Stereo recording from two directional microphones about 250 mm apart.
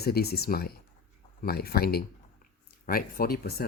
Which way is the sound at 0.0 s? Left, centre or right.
Left.